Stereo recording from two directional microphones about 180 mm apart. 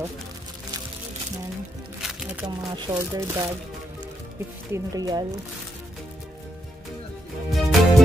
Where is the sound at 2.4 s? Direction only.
20° right (ahead or behind).